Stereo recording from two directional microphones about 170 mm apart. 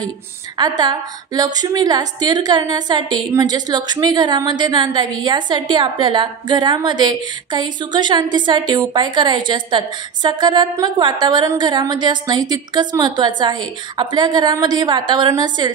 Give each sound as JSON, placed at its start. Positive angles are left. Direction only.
{"t": 0.6, "sound": "a woman's voice", "side_deg": -25}